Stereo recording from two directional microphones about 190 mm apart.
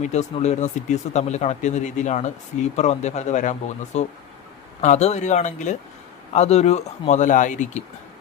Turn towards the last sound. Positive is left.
turn(degrees=40)  # may be behind; listen again after turning